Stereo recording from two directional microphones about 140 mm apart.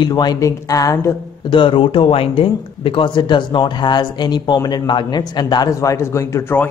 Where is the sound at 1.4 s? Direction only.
35° left (ahead or behind).